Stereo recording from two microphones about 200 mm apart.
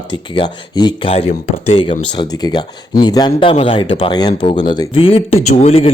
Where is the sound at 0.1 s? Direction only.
25° left (ahead or behind).